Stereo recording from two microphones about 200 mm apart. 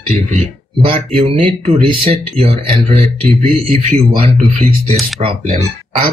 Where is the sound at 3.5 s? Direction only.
30° right (ahead or behind).